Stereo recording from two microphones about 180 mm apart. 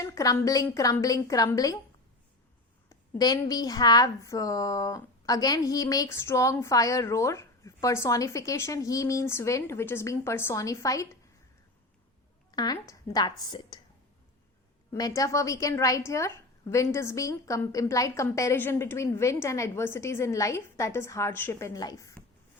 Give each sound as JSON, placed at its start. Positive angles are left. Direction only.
{"t": 0.0, "sound": "a woman's voice", "side_deg": 20}
{"t": 3.2, "sound": "a woman's voice", "side_deg": 20}
{"t": 12.5, "sound": "a woman's voice", "side_deg": 20}
{"t": 14.9, "sound": "a woman's voice", "side_deg": 20}